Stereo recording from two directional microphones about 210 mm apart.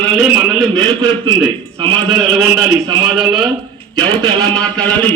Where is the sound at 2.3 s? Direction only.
5° right (ahead or behind).